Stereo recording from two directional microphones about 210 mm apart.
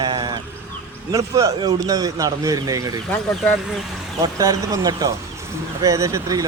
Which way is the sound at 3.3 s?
Centre (ahead or behind).